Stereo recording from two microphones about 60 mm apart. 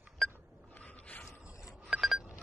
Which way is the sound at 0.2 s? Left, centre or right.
Centre.